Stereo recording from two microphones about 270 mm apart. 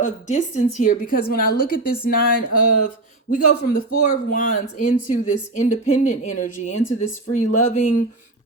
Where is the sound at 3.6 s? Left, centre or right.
Left.